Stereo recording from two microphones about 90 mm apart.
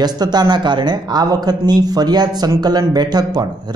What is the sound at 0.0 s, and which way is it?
A man's voice, 50° right (ahead or behind).